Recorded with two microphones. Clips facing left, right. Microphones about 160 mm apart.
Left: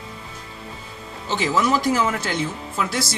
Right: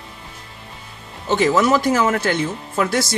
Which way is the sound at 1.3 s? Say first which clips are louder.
Right 5 dB; 55° right (ahead or behind).